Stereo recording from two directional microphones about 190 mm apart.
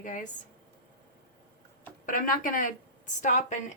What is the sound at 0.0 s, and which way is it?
Speech, 45° left (ahead or behind).